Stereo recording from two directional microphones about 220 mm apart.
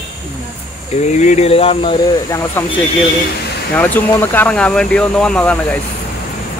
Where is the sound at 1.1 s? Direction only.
30° left (ahead or behind); by 2.6 s 15° left (ahead or behind).